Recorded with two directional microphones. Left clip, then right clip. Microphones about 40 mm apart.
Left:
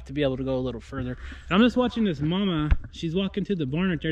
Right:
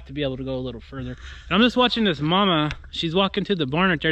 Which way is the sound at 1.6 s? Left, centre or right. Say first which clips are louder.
Right 6 dB; centre.